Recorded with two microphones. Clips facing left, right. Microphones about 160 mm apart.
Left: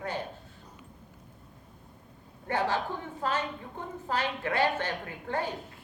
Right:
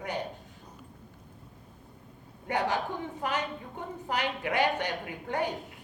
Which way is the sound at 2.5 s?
15° right (ahead or behind).